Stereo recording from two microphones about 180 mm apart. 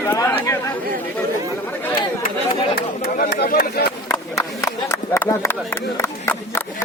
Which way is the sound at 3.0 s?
60° left (ahead or behind).